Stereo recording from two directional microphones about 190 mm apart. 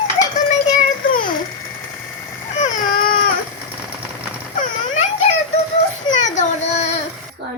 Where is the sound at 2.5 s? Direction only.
40° left (ahead or behind).